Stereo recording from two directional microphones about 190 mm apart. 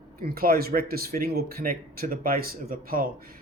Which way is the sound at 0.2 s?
50° right (ahead or behind).